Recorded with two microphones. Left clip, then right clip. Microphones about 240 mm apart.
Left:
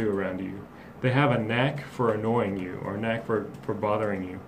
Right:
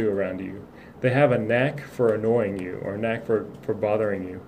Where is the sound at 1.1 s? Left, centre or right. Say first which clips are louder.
Right 5 dB; centre.